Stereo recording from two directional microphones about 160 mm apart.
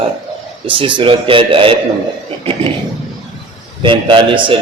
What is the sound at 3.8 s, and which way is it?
Speech, 30° right (ahead or behind).